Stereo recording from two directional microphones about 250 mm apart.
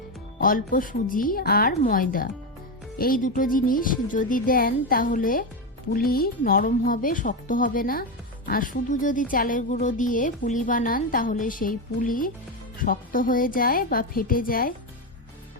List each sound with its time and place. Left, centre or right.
0.3 s speech: left